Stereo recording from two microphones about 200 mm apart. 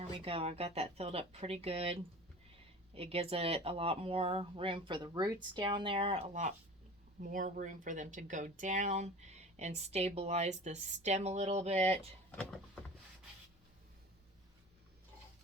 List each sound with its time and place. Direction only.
0.0 s speech: 30° right (ahead or behind)